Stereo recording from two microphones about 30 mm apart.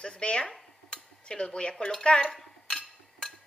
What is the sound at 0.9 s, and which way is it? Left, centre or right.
Dishes, left.